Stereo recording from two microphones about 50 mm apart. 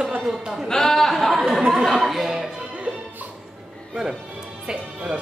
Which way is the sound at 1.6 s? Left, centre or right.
Centre.